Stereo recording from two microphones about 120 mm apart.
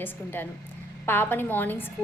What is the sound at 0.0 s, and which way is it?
A woman's voice, 15° left (ahead or behind).